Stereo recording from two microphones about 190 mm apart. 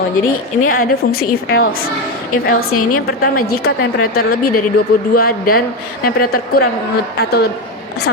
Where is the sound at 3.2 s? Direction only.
55° left (ahead or behind).